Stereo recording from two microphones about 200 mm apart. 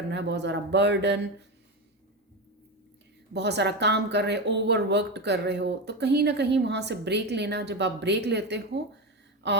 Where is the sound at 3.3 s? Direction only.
60° right (ahead or behind).